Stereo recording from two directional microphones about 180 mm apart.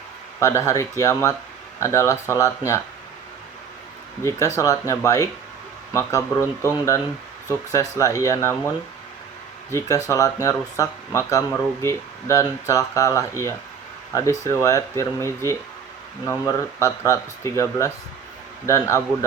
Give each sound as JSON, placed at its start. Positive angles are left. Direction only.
{"t": 0.3, "sound": "speech", "side_deg": 15}
{"t": 4.3, "sound": "speech", "side_deg": 15}